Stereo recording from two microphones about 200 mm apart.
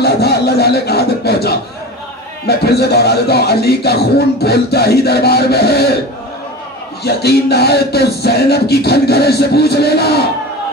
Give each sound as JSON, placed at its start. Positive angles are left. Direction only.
{"t": 0.0, "sound": "speech", "side_deg": 55}
{"t": 7.0, "sound": "speech", "side_deg": 55}